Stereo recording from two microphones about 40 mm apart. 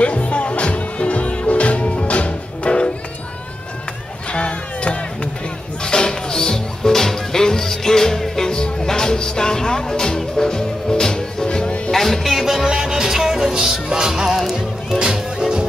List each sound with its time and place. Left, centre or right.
0.0 s music: left
4.3 s music: left
11.9 s music: centre
12.6 s music: centre
14.4 s music: centre
15.0 s music: centre